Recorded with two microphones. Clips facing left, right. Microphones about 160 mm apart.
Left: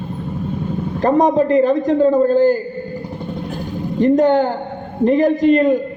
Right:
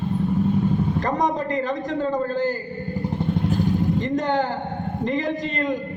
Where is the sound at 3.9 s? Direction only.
55° left (ahead or behind).